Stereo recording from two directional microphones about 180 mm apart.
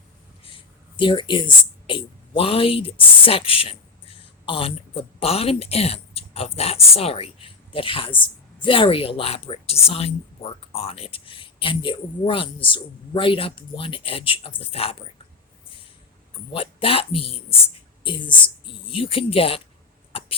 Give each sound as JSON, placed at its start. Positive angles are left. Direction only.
{"t": 0.9, "sound": "speech", "side_deg": 25}
{"t": 16.5, "sound": "speech", "side_deg": 30}